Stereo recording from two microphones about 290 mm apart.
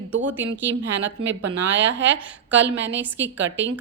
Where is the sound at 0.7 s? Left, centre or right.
Right.